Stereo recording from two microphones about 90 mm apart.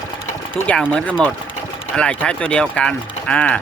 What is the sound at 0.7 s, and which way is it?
Speech, 15° left (ahead or behind).